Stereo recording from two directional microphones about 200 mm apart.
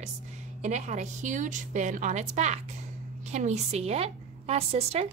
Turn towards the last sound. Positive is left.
turn(degrees=-30)  # may be behind; listen again after turning